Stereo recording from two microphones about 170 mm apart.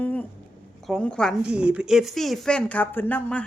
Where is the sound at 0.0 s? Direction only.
10° left (ahead or behind).